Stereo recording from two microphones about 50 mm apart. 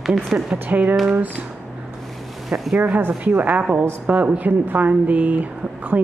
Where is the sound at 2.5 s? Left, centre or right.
Right.